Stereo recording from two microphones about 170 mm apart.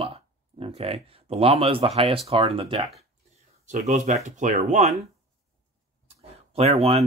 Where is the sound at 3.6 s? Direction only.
45° right (ahead or behind).